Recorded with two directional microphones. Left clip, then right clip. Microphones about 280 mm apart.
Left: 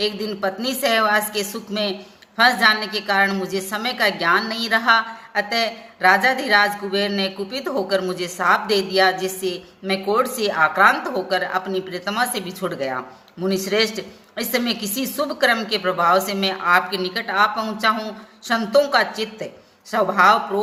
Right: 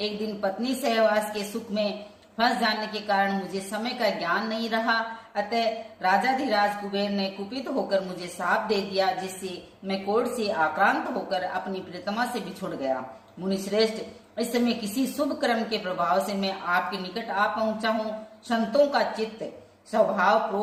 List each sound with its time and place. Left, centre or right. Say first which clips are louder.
0.0 s a woman's voice: left 6 dB; left